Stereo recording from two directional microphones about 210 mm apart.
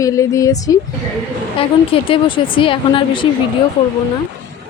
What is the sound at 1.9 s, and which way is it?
Speech, 25° left (ahead or behind).